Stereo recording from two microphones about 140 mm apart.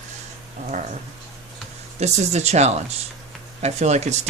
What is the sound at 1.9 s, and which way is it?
Speech, 55° right (ahead or behind).